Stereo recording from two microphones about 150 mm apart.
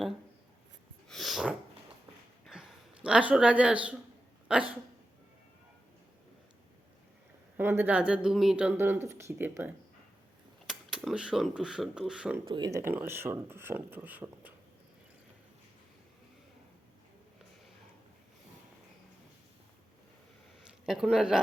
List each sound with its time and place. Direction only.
1.0 s dog: centre (ahead or behind)
2.4 s a sound: 5° right (ahead or behind)
4.4 s hiccup: 5° right (ahead or behind)
7.5 s speech: 15° right (ahead or behind)
10.7 s speech: centre (ahead or behind)
12.5 s speech: 25° right (ahead or behind)
12.8 s speech: 15° right (ahead or behind)
20.8 s speech: 5° right (ahead or behind)